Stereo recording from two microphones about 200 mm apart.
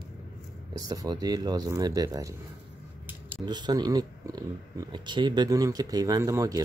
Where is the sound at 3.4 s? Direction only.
20° right (ahead or behind).